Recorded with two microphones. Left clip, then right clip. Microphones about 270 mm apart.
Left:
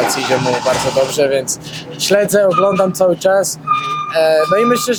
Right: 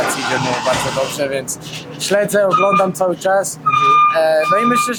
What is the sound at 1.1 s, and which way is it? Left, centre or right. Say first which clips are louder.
Speech: left 6 dB; left.